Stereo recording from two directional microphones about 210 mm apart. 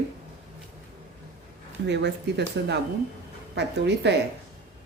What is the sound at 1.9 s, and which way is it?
Speech, 55° right (ahead or behind).